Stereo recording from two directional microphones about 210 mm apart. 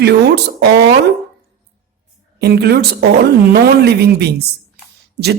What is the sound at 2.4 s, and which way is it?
A woman's voice, 50° right (ahead or behind).